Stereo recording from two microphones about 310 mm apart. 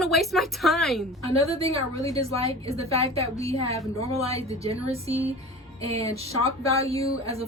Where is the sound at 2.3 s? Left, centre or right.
Centre.